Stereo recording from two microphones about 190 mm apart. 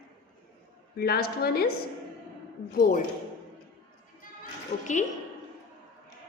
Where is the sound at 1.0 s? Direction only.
55° left (ahead or behind).